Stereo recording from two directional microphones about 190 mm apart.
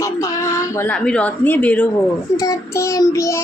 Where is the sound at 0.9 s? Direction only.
5° left (ahead or behind).